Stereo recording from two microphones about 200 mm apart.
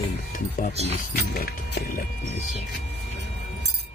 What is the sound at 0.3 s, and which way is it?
Speech, 40° left (ahead or behind).